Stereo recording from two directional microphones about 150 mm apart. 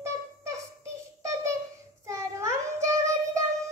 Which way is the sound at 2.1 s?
20° right (ahead or behind).